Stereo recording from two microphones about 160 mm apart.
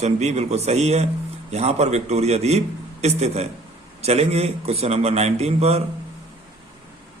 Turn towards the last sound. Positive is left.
turn(degrees=-40)  # may be behind; listen again after turning